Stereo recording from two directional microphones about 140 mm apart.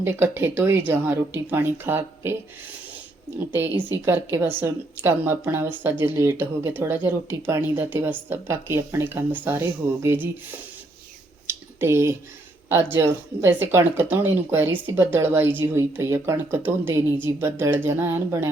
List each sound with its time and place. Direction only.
0.0 s speech: 15° right (ahead or behind)
3.3 s speech: 15° right (ahead or behind)
11.4 s a sound: 15° right (ahead or behind)
12.6 s speech: 20° right (ahead or behind)